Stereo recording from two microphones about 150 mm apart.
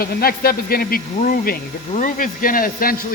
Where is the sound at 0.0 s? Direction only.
85° left.